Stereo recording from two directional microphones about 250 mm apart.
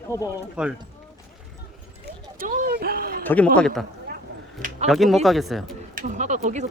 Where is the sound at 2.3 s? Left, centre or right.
Right.